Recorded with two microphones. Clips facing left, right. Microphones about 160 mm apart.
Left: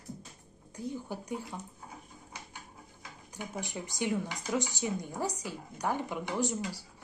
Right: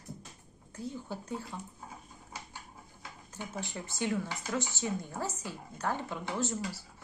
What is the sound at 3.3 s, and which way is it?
Speech, 15° left (ahead or behind).